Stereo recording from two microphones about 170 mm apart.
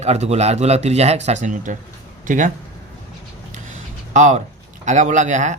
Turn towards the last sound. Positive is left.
turn(degrees=-45)  # may be behind; listen again after turning